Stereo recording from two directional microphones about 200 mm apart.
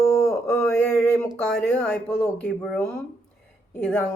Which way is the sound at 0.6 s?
5° left (ahead or behind).